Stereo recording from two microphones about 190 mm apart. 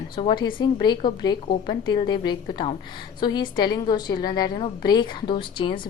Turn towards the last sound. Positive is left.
turn(degrees=25)  # may be behind; listen again after turning